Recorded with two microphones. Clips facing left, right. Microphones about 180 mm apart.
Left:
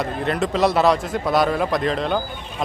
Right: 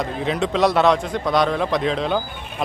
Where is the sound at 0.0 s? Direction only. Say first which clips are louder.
Even; centre (ahead or behind).